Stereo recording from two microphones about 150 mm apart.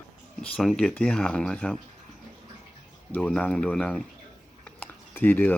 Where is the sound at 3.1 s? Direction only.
10° left (ahead or behind).